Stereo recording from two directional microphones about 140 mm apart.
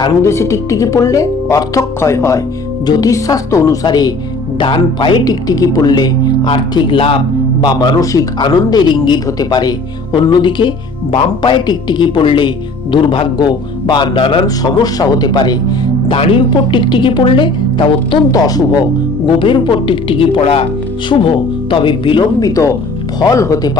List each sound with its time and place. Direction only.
0.0 s speech: 20° left (ahead or behind); by 22.5 s 35° left (ahead or behind)
22.5 s speech: 20° left (ahead or behind)